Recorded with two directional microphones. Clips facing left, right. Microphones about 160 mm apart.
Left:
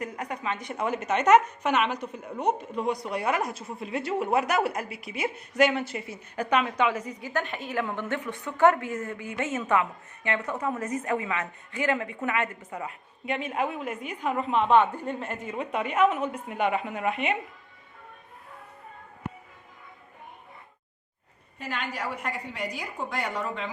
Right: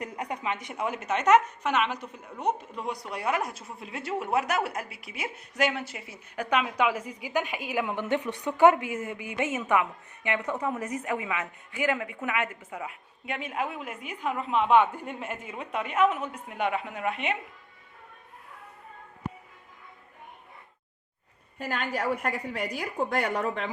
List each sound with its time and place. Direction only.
0.0 s a woman's voice: 20° right (ahead or behind)
0.8 s a woman's voice: 5° right (ahead or behind)
21.6 s a woman's voice: 45° right (ahead or behind)